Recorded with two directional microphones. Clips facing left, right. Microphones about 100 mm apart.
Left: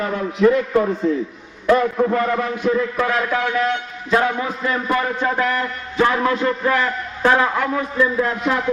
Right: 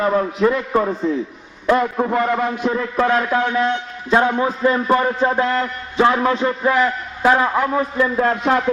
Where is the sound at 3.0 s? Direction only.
30° right (ahead or behind).